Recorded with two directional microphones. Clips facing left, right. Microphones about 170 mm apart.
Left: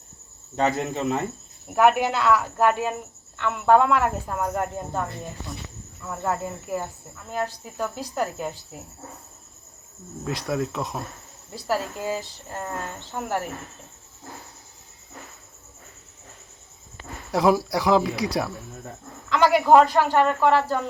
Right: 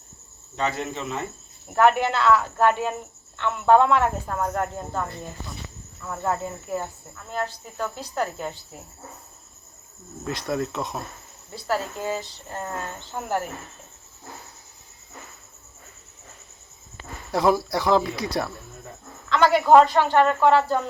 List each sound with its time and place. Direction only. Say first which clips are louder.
0.5 s speech: left 4 dB; 45° left (ahead or behind)
1.6 s speech: even; 10° left (ahead or behind)
6.1 s speech: even; 10° left (ahead or behind)
10.4 s speech: even; centre (ahead or behind)
17.3 s speech: left 1 dB; 5° left (ahead or behind)
19.3 s speech: right 1 dB; 10° left (ahead or behind)